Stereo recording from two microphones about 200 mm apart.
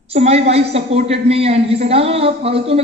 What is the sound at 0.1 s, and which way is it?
A woman's voice, 30° right (ahead or behind).